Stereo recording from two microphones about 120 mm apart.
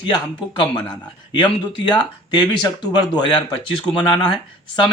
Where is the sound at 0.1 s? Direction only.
40° left (ahead or behind).